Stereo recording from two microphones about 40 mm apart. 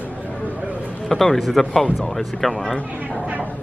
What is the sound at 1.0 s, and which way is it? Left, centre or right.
A man's voice, centre.